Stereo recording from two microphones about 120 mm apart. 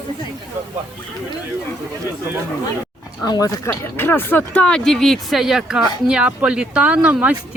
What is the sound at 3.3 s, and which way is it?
Speech, 30° left (ahead or behind).